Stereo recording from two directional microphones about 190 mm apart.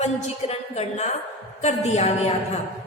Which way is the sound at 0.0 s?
35° left (ahead or behind).